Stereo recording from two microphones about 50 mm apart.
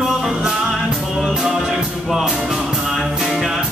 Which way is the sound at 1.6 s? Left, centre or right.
Centre.